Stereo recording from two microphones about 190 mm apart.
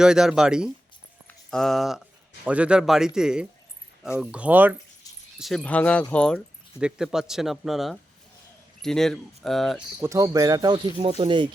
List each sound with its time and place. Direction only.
0.0 s a man's voice: 5° right (ahead or behind)
5.0 s a sound: 20° left (ahead or behind)
5.4 s speech: centre (ahead or behind)
6.7 s a man's voice: 5° right (ahead or behind)
10.0 s speech: 15° right (ahead or behind)